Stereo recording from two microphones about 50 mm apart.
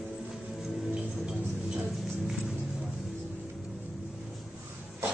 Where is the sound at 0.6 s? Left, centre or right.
Centre.